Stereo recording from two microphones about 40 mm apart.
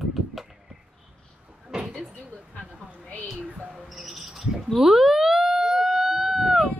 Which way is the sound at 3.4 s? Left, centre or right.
Right.